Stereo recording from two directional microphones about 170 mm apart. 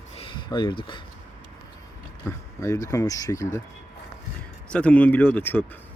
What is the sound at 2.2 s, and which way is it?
Speech, 20° left (ahead or behind).